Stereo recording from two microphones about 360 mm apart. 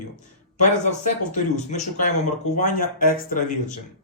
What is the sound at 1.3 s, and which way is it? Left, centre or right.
Speech, centre.